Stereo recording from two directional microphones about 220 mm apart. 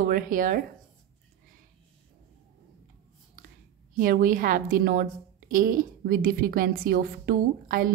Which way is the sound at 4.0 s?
40° right (ahead or behind).